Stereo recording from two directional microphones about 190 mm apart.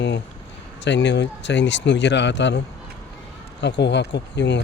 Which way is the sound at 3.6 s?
65° left (ahead or behind).